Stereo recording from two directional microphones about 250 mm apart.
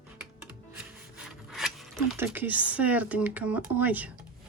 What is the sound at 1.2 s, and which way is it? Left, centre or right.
Zipper, centre.